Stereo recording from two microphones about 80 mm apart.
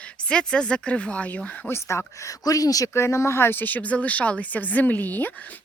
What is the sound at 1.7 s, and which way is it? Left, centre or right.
Speech, left.